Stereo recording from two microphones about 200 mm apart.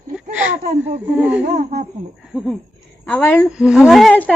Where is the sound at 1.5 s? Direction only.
35° right (ahead or behind).